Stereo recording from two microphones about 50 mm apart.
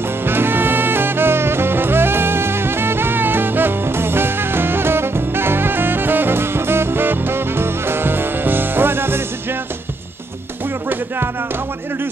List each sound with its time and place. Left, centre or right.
0.2 s music: right